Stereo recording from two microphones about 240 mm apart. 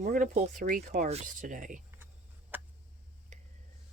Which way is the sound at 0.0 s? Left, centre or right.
Right.